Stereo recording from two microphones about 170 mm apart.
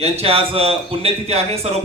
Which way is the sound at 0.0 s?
35° right (ahead or behind).